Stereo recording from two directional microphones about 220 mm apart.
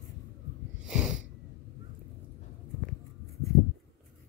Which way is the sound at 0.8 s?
Centre (ahead or behind).